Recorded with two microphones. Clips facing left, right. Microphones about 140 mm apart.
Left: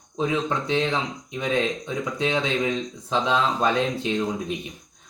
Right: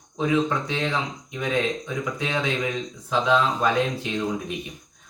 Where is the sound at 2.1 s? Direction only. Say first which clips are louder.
Left 4 dB; 25° left (ahead or behind).